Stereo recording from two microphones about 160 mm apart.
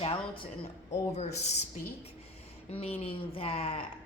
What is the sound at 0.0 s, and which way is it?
Speech, 30° left (ahead or behind).